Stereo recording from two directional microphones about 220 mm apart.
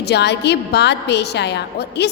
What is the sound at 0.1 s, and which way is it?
A woman's voice, 50° left (ahead or behind).